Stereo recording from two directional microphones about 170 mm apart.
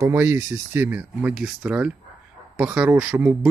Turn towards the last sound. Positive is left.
turn(degrees=-10)  # may be behind; listen again after turning